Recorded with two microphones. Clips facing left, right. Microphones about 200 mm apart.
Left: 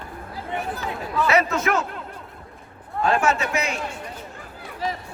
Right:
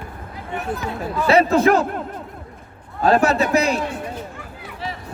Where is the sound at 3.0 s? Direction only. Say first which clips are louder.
Right 5 dB; 35° right (ahead or behind).